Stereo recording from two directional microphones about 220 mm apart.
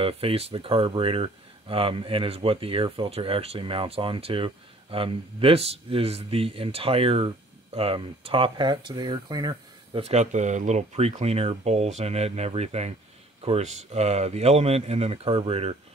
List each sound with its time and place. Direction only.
0.0 s speech: 25° right (ahead or behind)